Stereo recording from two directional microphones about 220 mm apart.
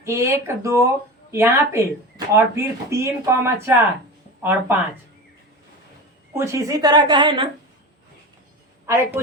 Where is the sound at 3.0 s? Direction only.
10° right (ahead or behind).